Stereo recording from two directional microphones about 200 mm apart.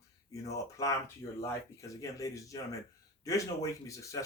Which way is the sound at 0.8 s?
15° left (ahead or behind).